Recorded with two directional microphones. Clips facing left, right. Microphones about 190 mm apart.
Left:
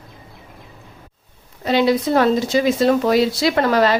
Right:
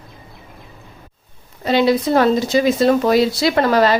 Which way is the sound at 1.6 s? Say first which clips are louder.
Right 1 dB; 30° right (ahead or behind).